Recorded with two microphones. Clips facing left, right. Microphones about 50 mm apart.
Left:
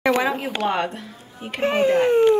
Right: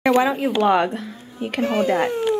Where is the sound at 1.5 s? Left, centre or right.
Left.